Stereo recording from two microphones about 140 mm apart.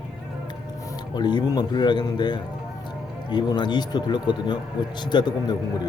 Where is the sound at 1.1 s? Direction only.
30° left (ahead or behind).